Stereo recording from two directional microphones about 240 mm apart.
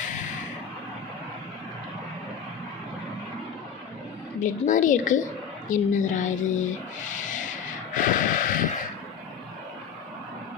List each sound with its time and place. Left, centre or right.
4.4 s a woman's voice: left
7.1 s vehicle: left